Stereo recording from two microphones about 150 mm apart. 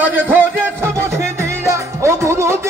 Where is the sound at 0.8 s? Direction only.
15° right (ahead or behind).